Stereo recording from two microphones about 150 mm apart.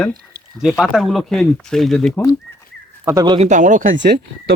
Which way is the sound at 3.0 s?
25° right (ahead or behind).